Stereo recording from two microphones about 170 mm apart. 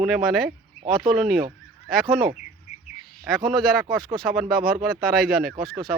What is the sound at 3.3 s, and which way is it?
Speech, centre (ahead or behind).